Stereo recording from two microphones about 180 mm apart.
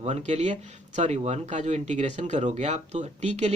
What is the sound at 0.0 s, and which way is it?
Speech, 35° right (ahead or behind).